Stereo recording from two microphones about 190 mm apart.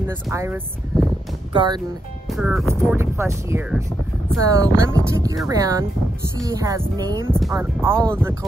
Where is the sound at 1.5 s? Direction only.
25° right (ahead or behind).